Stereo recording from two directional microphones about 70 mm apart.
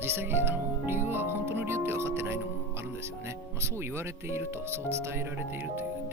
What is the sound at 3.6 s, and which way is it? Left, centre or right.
Speech, right.